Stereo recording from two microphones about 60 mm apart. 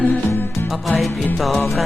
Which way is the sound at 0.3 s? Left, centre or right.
Left.